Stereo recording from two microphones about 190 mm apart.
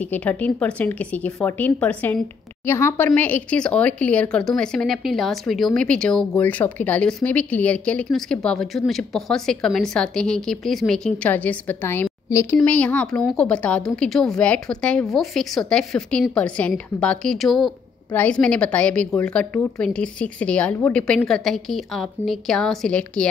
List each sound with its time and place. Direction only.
0.0 s a woman's voice: 10° left (ahead or behind)